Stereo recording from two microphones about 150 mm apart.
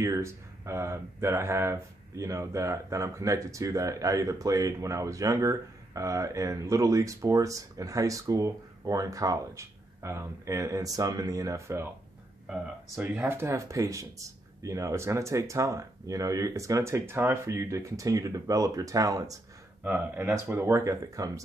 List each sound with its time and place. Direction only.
0.0 s speech: 20° right (ahead or behind)
12.9 s speech: 15° right (ahead or behind)
19.8 s speech: 10° right (ahead or behind)